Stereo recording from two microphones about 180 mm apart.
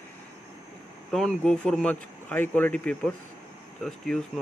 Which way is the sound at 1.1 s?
5° left (ahead or behind).